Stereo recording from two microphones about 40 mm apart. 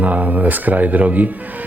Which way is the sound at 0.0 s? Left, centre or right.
Right.